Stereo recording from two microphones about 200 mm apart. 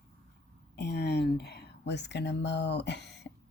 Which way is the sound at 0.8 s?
55° left (ahead or behind).